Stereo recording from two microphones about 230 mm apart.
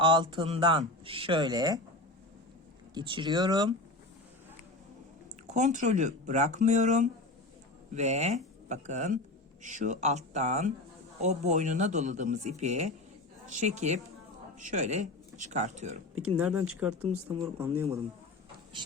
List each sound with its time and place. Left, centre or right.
0.0 s speech: right
2.9 s speech: right
5.5 s speech: right
16.4 s speech: centre